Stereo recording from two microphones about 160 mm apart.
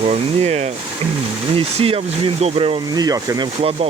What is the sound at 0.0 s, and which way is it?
Speech, 40° right (ahead or behind).